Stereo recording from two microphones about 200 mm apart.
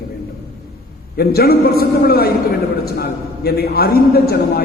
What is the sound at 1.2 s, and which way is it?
A man's voice, 50° left (ahead or behind).